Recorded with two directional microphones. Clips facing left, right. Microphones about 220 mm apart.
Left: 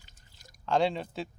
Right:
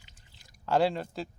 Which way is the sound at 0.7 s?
5° right (ahead or behind).